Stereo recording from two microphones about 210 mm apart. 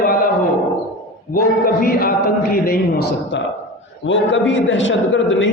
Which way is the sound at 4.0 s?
60° left (ahead or behind).